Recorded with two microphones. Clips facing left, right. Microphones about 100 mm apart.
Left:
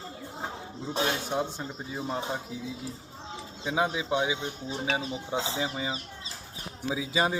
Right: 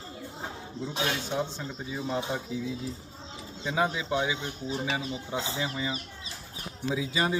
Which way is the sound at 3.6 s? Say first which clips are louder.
Even; 15° left (ahead or behind).